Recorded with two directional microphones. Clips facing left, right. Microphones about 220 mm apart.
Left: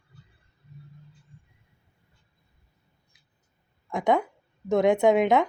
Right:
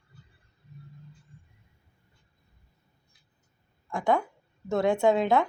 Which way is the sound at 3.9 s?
20° left (ahead or behind).